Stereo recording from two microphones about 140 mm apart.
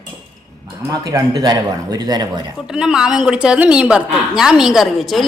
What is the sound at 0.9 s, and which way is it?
A man's voice, 25° right (ahead or behind).